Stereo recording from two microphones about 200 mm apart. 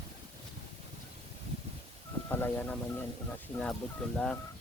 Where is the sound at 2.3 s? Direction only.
10° left (ahead or behind).